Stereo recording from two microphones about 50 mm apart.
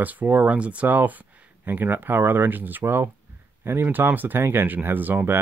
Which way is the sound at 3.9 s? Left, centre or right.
Right.